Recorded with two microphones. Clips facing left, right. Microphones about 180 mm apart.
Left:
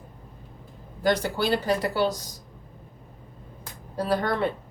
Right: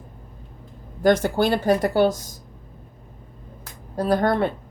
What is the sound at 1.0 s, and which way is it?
Speech, 50° right (ahead or behind).